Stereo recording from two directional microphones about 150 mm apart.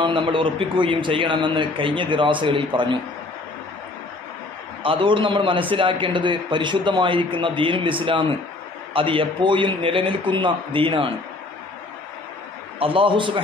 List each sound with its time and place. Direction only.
0.0 s a man's voice: 35° right (ahead or behind)
4.8 s a man's voice: 35° right (ahead or behind)
12.7 s a man's voice: 35° right (ahead or behind)